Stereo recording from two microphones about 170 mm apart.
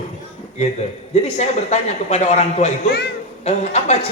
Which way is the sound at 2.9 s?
70° left (ahead or behind).